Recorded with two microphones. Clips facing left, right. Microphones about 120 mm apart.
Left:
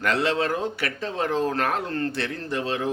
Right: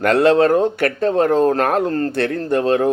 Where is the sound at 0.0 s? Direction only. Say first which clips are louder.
Right 11 dB; 50° right (ahead or behind).